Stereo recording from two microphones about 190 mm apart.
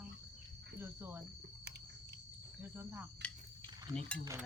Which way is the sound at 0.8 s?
10° right (ahead or behind).